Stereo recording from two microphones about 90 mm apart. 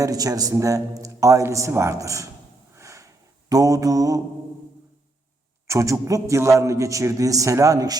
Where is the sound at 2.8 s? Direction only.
35° right (ahead or behind).